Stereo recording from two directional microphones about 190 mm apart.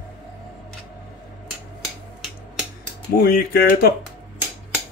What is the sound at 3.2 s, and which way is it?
Speech, 50° left (ahead or behind).